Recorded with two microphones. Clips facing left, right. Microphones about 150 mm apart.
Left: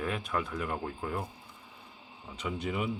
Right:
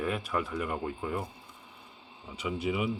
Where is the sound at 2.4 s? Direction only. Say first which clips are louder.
Right 3 dB; 5° right (ahead or behind).